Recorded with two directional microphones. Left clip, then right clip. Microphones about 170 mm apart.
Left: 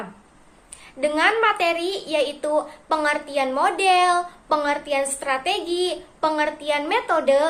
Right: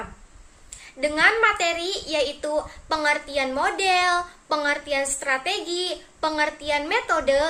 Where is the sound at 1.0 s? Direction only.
15° right (ahead or behind).